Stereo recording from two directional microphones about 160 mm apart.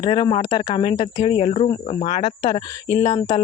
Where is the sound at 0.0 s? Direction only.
30° left (ahead or behind).